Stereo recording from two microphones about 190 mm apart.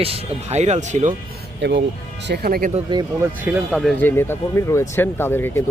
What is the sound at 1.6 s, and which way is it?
Speech, 65° right (ahead or behind).